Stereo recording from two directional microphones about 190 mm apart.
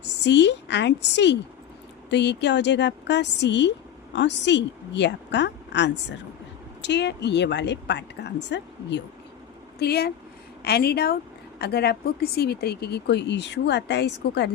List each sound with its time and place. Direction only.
0.0 s a woman's voice: 65° left (ahead or behind)